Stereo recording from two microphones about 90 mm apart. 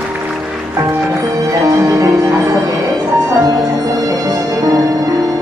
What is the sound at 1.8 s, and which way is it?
Music, 40° right (ahead or behind).